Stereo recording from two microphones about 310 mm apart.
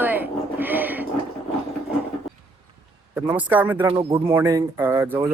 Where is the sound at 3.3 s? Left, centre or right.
Centre.